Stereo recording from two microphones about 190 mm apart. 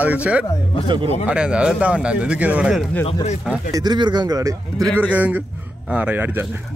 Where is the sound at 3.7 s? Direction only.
20° right (ahead or behind).